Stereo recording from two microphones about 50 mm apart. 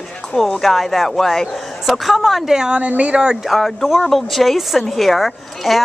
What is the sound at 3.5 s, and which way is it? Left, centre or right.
Speech, centre.